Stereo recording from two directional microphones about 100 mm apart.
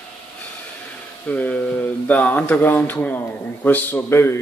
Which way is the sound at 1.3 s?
15° left (ahead or behind).